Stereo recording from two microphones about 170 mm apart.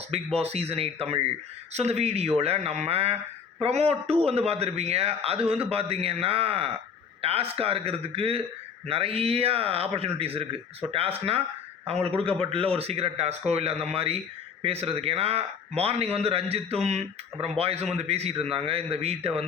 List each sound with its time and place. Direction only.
0.3 s a man's voice: 35° right (ahead or behind)